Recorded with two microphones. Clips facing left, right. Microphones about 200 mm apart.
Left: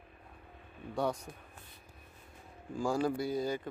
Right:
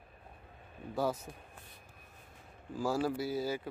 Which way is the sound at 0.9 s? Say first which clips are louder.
Even; 5° right (ahead or behind).